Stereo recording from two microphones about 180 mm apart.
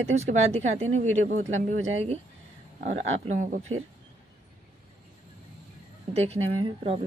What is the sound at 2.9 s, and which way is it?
Speech, 90° right.